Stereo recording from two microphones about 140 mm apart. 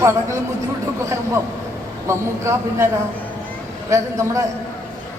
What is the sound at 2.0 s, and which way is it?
Speech, 20° right (ahead or behind).